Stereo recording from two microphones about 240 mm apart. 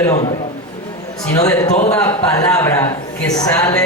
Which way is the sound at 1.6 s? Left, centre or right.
Left.